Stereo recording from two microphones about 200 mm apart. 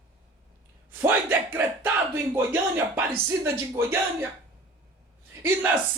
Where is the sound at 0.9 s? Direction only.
10° right (ahead or behind).